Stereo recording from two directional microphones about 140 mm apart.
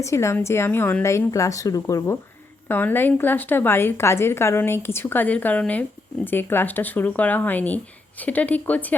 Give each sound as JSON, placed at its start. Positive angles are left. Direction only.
{"t": 0.0, "sound": "a woman's voice", "side_deg": 20}